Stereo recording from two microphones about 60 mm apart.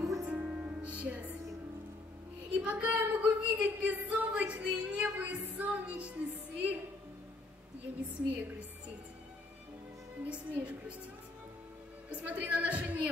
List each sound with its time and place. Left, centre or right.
0.0 s music: right
0.3 s music: right
2.5 s a sound: right
5.1 s music: right
8.3 s a woman's voice: right
10.2 s a woman's voice: right
12.1 s a woman's voice: right